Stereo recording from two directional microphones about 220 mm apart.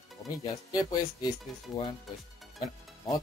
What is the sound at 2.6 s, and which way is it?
Speech, 15° left (ahead or behind).